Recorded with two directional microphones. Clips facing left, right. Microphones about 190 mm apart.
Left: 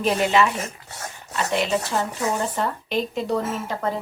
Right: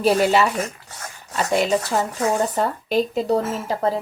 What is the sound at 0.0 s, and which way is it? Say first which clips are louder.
A woman's voice: right 3 dB; 40° right (ahead or behind).